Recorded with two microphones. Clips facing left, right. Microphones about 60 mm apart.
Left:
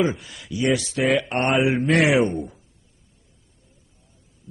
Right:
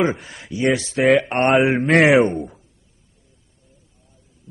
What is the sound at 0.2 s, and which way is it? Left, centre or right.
Speech, right.